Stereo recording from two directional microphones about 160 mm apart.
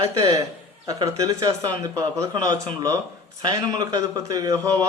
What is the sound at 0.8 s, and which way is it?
A man's voice, 20° right (ahead or behind).